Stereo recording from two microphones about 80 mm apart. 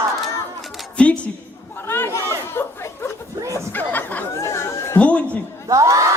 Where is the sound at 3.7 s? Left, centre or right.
Left.